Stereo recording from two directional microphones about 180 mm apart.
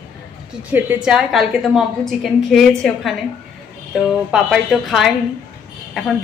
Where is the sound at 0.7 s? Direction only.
5° right (ahead or behind).